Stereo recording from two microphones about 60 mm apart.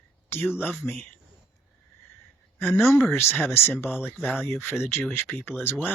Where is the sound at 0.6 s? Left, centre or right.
Left.